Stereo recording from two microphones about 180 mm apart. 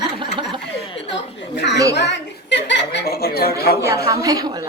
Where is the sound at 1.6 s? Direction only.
70° left (ahead or behind).